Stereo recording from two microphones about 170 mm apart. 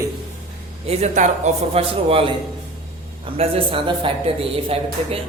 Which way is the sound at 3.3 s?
35° right (ahead or behind).